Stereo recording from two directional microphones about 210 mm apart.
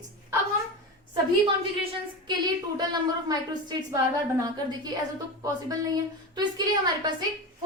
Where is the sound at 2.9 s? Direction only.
20° right (ahead or behind).